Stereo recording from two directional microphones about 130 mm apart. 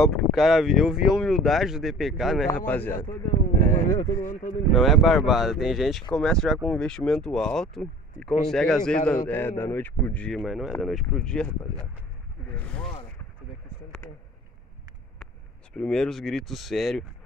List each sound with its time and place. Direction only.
0.0 s speech: centre (ahead or behind)
2.5 s speech: 15° left (ahead or behind)
4.2 s speech: 90° left
4.7 s a man's voice: centre (ahead or behind)
12.5 s a man's voice: 10° left (ahead or behind)
15.7 s speech: 5° left (ahead or behind)